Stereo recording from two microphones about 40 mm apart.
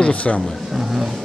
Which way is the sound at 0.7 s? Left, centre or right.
Centre.